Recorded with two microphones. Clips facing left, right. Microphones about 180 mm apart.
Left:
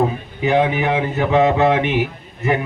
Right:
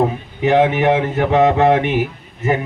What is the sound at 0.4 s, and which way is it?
Speech, 65° right (ahead or behind).